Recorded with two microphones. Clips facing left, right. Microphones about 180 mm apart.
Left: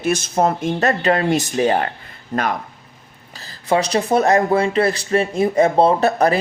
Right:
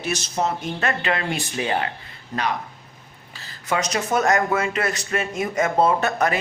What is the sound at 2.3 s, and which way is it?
Speech, 55° left (ahead or behind).